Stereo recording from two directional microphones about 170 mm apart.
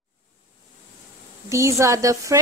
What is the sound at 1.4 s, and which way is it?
Speech, 15° right (ahead or behind).